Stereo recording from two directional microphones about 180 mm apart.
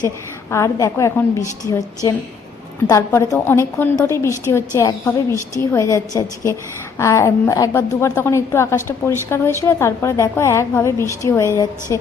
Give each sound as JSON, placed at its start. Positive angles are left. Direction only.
{"t": 0.5, "sound": "a woman's voice", "side_deg": 15}
{"t": 2.8, "sound": "a woman's voice", "side_deg": 15}